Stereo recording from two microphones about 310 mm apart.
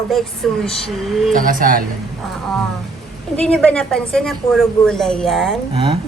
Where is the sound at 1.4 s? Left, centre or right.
Right.